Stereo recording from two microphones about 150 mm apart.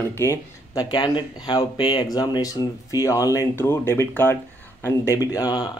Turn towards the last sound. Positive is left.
turn(degrees=25)  # may be behind; listen again after turning